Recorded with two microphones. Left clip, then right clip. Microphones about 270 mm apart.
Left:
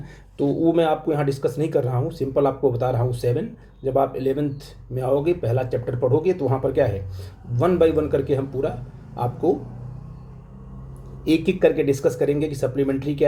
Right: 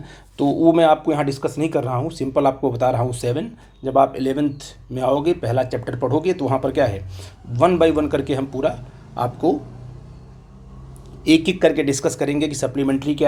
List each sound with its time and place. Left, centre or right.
0.6 s speech: centre
11.3 s speech: centre